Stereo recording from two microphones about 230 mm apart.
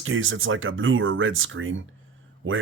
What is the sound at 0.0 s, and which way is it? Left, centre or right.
Speech, right.